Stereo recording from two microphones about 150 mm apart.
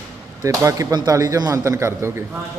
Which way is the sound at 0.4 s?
20° right (ahead or behind).